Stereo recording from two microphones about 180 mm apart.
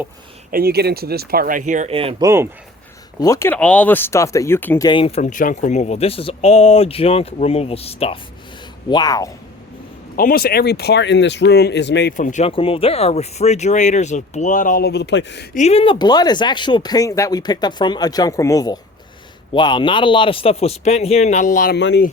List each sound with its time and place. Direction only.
0.5 s speech: 60° right (ahead or behind); by 2.0 s 45° right (ahead or behind)
2.0 s speech: 30° right (ahead or behind)
2.2 s speech: 15° right (ahead or behind)
3.2 s speech: 15° left (ahead or behind)
4.9 s speech: 30° left (ahead or behind)
8.9 s speech: 20° left (ahead or behind)
10.2 s speech: 55° left (ahead or behind); by 12.1 s 70° left (ahead or behind)
12.1 s speech: 45° left (ahead or behind); by 15.4 s 80° left
15.5 s speech: 35° left (ahead or behind)
21.8 s speech: 80° left